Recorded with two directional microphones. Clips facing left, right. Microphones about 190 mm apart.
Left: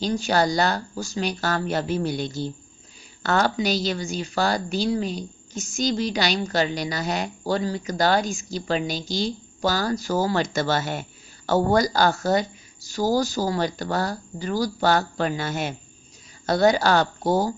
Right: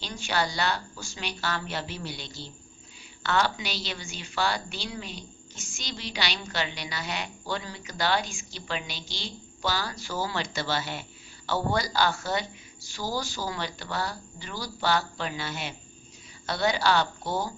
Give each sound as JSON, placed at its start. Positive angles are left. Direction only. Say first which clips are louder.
{"t": 0.0, "sound": "a woman's voice", "louder": "left 8 dB", "side_deg": 40}